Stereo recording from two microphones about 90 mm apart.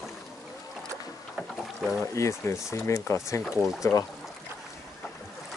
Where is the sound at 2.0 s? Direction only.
35° left (ahead or behind).